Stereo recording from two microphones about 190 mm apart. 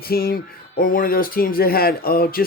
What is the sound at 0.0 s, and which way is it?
Speech, 50° left (ahead or behind).